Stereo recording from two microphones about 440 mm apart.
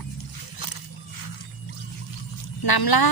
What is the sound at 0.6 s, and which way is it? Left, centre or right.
Wild animals, left.